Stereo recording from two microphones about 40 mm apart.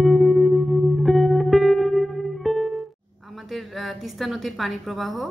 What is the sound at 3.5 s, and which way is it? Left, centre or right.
A woman's voice, centre.